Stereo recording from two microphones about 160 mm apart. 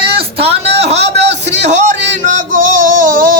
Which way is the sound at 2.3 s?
55° right (ahead or behind).